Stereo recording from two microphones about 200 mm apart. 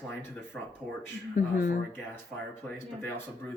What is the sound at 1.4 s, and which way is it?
Speech, 40° left (ahead or behind).